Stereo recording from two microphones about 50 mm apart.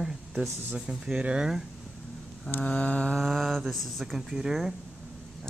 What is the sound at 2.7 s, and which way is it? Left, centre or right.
Music, left.